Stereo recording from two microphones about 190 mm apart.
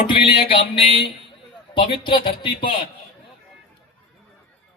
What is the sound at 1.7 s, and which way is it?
A man's voice, 25° left (ahead or behind).